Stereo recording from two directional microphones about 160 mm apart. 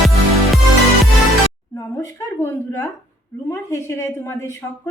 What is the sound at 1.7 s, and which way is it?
A woman's voice, 15° left (ahead or behind).